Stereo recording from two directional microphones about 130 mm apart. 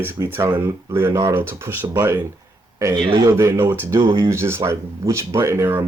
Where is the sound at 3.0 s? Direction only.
35° right (ahead or behind).